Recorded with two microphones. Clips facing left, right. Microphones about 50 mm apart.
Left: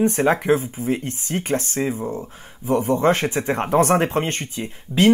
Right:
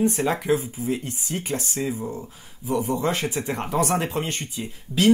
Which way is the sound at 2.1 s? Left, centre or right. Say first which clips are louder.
Left 4 dB; left.